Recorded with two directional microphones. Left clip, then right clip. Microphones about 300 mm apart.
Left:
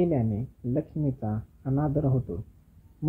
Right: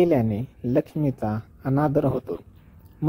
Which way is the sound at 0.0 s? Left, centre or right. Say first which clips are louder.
Right 7 dB; right.